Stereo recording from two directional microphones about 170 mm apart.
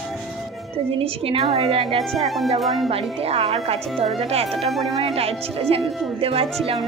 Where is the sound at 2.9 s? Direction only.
35° right (ahead or behind).